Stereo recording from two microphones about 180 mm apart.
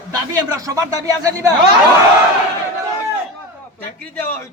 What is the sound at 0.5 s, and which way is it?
Speech, 20° right (ahead or behind).